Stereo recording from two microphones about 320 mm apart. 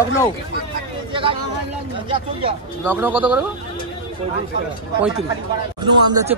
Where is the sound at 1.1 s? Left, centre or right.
Centre.